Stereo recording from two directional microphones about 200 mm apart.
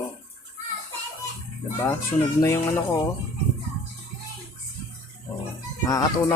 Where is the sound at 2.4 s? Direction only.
10° left (ahead or behind).